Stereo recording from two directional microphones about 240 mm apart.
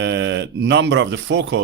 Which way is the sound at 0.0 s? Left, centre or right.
Right.